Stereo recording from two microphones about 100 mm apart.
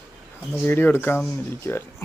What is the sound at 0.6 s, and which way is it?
Speech, 20° left (ahead or behind).